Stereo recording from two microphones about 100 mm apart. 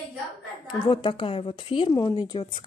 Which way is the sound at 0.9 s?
55° left (ahead or behind).